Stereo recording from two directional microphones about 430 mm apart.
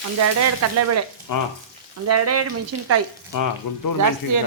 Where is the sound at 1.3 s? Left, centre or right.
Left.